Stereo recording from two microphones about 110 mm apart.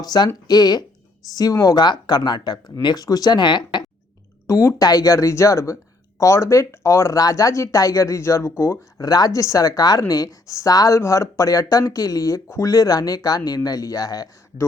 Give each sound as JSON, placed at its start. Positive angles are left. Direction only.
{"t": 0.0, "sound": "speech", "side_deg": 40}
{"t": 4.4, "sound": "speech", "side_deg": 25}